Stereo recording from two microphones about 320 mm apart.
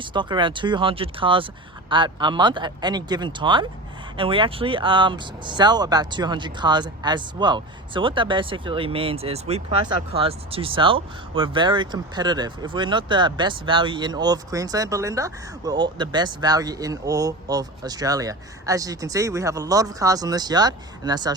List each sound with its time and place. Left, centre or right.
0.0 s speech: centre